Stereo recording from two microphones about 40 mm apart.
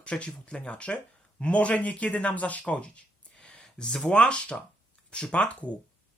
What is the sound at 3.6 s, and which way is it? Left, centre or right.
Speech, centre.